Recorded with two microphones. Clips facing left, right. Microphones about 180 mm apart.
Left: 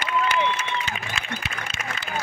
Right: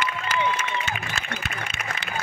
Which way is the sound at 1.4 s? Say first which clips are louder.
Even; 50° right (ahead or behind).